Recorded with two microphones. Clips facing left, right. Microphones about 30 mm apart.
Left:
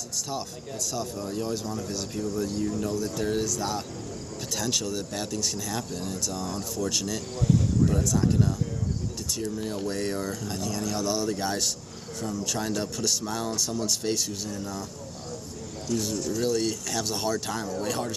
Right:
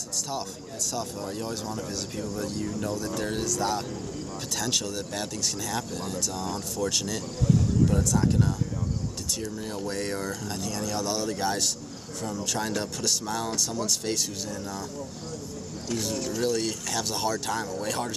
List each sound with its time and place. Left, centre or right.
0.9 s speech: centre
15.9 s speech: right
16.4 s speech: centre